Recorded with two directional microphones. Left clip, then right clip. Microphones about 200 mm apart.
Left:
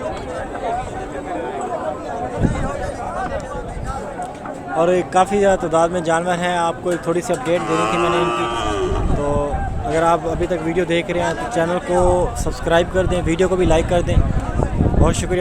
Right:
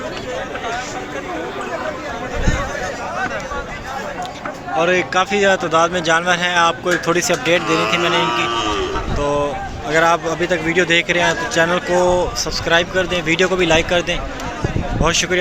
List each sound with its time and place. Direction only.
4.8 s a man's voice: 25° left (ahead or behind)
9.2 s a sound: 10° left (ahead or behind)
9.9 s a man's voice: 10° left (ahead or behind)